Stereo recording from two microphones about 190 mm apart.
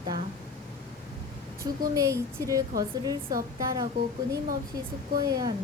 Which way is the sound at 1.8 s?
20° right (ahead or behind).